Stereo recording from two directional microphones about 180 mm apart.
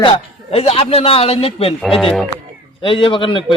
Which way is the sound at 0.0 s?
30° left (ahead or behind).